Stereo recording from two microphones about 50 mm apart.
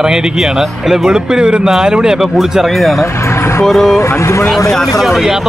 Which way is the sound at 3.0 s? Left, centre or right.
Left.